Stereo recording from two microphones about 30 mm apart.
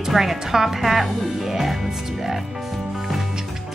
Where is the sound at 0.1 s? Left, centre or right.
Centre.